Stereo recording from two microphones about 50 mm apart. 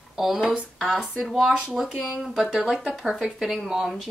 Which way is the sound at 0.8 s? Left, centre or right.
Centre.